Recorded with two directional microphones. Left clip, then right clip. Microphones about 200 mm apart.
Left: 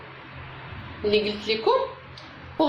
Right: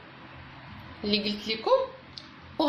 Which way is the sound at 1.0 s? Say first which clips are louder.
Left 6 dB; 40° right (ahead or behind).